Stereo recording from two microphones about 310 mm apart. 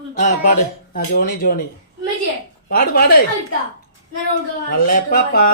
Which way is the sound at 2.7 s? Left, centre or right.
Left.